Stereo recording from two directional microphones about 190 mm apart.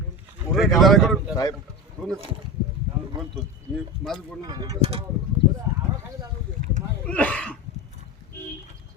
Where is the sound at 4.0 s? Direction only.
Centre (ahead or behind).